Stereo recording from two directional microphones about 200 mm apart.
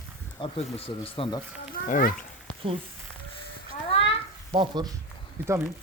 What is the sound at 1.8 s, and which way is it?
Speech, 40° left (ahead or behind).